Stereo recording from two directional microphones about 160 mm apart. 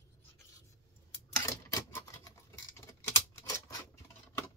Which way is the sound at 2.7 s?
15° left (ahead or behind).